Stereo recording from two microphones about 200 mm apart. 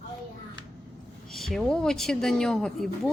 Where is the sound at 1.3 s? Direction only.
Centre (ahead or behind).